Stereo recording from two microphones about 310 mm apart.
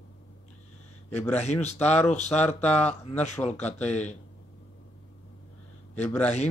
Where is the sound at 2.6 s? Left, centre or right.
Centre.